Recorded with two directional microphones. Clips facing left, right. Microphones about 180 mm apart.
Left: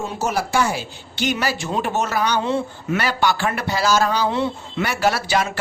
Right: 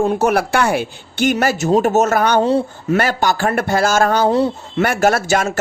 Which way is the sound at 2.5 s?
40° right (ahead or behind).